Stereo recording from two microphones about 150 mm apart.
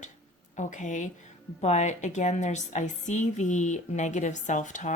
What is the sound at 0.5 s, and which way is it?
A woman's voice, 55° left (ahead or behind).